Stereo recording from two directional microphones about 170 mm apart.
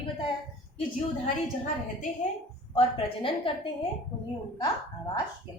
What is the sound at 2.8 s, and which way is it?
Speech, 30° left (ahead or behind).